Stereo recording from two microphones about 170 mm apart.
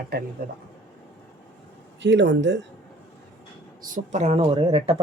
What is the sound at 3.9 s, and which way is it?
Speech, 45° right (ahead or behind).